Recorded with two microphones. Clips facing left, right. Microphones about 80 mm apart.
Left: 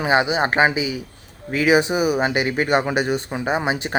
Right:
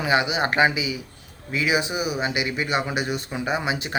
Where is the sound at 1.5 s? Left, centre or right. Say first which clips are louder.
Left 6 dB; left.